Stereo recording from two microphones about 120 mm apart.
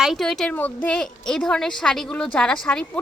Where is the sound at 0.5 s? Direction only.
15° left (ahead or behind).